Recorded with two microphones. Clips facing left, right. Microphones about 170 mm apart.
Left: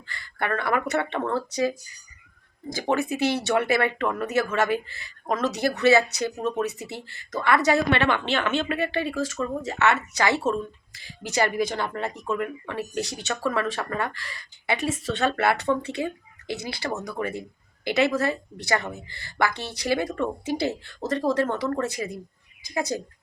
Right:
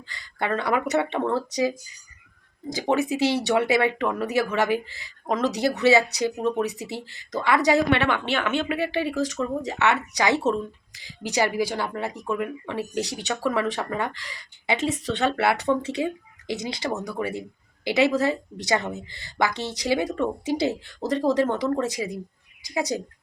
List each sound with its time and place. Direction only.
0.1 s speech: 15° right (ahead or behind)
2.7 s speech: 15° right (ahead or behind)